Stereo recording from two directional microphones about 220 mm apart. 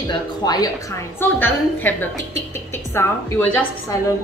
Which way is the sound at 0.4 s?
15° left (ahead or behind).